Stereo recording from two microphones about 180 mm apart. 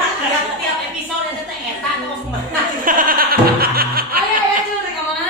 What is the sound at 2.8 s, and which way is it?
Laughter, 50° right (ahead or behind).